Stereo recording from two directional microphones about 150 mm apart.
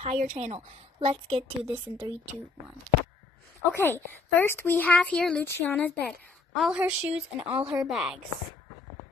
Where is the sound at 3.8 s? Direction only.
15° left (ahead or behind).